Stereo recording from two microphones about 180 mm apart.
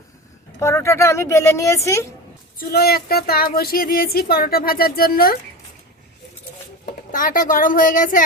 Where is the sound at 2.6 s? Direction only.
60° left (ahead or behind).